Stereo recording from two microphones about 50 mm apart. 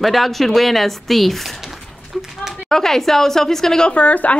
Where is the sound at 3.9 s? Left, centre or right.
Left.